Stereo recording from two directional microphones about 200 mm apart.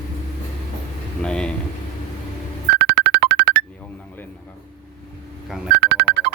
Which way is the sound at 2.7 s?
65° right (ahead or behind).